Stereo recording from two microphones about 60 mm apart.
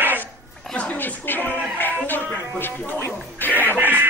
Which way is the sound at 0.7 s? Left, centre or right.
Left.